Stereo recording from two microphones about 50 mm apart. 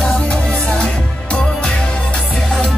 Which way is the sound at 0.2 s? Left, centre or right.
Left.